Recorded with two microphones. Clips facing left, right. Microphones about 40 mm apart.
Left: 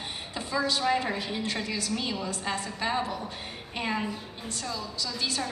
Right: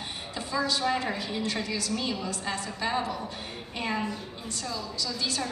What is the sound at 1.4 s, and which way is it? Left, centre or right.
Speech, left.